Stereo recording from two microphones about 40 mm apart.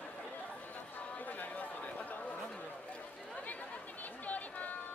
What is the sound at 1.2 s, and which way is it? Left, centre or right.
Chatter, left.